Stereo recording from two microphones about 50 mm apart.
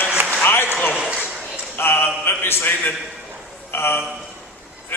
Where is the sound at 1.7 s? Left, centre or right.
Left.